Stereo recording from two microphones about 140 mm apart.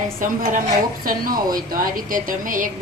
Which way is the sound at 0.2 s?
75° right (ahead or behind).